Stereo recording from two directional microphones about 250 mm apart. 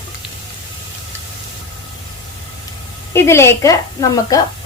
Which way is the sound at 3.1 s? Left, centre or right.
Centre.